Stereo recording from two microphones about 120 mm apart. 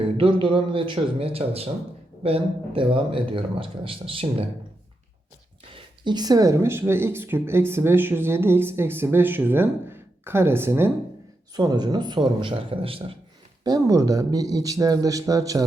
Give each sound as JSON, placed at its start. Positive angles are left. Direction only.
{"t": 0.2, "sound": "a man's voice", "side_deg": -45}
{"t": 5.7, "sound": "speech", "side_deg": -35}
{"t": 11.5, "sound": "a man's voice", "side_deg": -35}
{"t": 13.7, "sound": "speech", "side_deg": -30}